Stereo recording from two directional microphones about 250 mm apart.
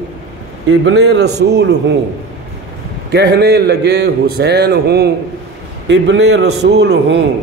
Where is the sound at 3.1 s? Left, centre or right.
Right.